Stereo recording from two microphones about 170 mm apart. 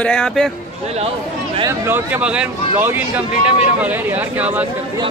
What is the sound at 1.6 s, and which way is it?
Speech, 15° right (ahead or behind).